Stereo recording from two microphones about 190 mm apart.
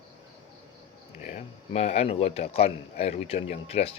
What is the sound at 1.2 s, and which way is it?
A man's voice, 35° left (ahead or behind).